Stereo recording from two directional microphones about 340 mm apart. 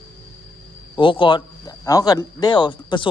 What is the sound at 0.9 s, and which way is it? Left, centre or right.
Speech, centre.